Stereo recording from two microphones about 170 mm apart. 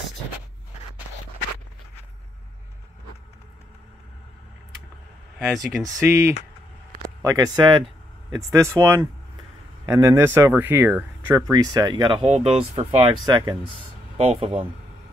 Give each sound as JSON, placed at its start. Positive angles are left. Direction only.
{"t": 5.4, "sound": "speech", "side_deg": 0}
{"t": 5.9, "sound": "speech", "side_deg": -15}
{"t": 12.2, "sound": "speech", "side_deg": -40}
{"t": 14.1, "sound": "speech", "side_deg": -40}